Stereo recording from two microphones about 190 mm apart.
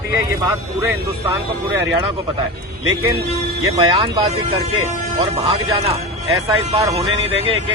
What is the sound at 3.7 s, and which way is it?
Speech, 25° right (ahead or behind).